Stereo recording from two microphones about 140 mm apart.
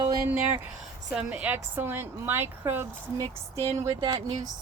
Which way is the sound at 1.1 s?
5° right (ahead or behind).